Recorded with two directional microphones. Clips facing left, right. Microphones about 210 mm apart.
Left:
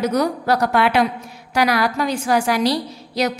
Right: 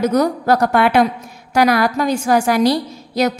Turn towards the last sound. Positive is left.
turn(degrees=-50)  # may be behind; listen again after turning